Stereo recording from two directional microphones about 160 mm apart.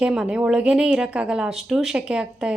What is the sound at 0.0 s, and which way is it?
A woman's voice, 5° right (ahead or behind).